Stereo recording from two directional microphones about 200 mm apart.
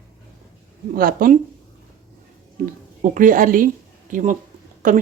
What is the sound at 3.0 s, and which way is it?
Speech, 40° right (ahead or behind).